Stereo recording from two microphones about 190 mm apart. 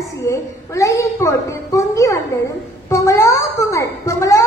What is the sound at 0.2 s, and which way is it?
A child's voice, 15° left (ahead or behind).